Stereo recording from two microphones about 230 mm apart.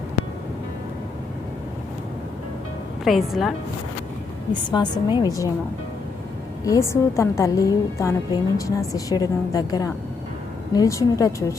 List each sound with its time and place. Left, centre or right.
3.0 s a woman's voice: centre
4.7 s a woman's voice: centre
6.7 s a woman's voice: centre